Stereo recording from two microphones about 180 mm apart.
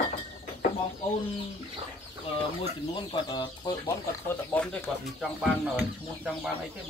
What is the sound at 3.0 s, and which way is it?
Speech, 25° left (ahead or behind).